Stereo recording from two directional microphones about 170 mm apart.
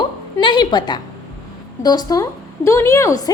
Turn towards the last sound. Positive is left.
turn(degrees=20)  # may be behind; listen again after turning